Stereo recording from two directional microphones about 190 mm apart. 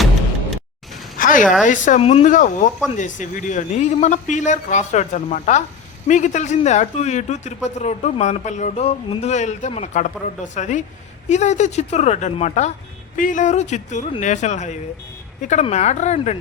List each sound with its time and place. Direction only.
1.2 s a woman's voice: 45° left (ahead or behind)
2.0 s speech: 30° left (ahead or behind)